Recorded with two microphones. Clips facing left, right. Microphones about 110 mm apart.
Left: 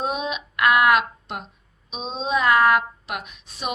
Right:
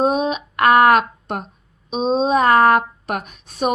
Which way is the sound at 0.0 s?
40° right (ahead or behind).